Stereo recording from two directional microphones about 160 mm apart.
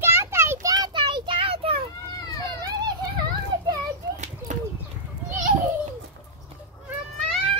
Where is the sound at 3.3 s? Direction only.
25° right (ahead or behind).